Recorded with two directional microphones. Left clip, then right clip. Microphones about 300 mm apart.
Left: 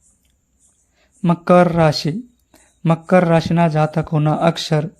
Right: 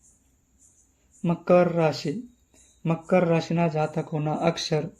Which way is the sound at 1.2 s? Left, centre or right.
Left.